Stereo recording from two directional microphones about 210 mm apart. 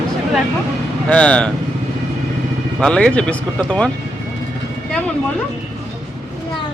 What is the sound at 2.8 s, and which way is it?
Speech, 5° left (ahead or behind).